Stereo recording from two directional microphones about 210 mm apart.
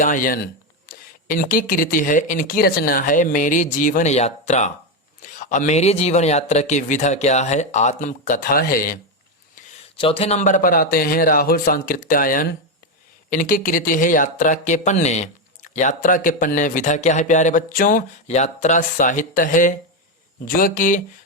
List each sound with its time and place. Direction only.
0.0 s speech: 40° left (ahead or behind)
9.6 s a sound: 40° left (ahead or behind)
10.0 s speech: 25° left (ahead or behind)